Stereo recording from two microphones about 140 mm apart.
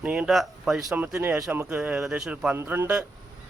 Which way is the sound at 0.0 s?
5° right (ahead or behind).